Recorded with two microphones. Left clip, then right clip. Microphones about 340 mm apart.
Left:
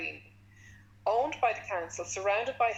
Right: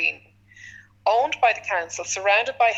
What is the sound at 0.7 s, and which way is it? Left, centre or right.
A woman's voice, right.